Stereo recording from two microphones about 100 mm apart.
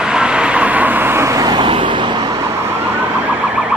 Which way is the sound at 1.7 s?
55° right (ahead or behind).